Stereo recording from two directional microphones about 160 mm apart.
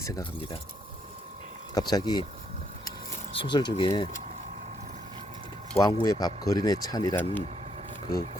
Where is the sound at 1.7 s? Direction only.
25° left (ahead or behind).